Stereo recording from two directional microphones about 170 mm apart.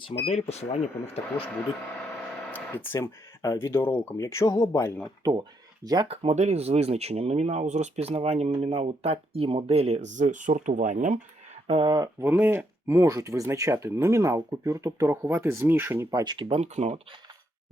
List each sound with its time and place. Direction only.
0.3 s speech: 40° left (ahead or behind)
2.9 s speech: 20° left (ahead or behind)
5.2 s speech: 20° right (ahead or behind)
6.1 s speech: 40° right (ahead or behind)
11.7 s speech: 30° right (ahead or behind)
12.2 s speech: 10° right (ahead or behind)
16.2 s speech: 30° right (ahead or behind)